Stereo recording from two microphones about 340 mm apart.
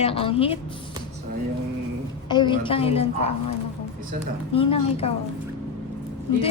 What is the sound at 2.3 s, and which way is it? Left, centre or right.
A woman's voice, centre.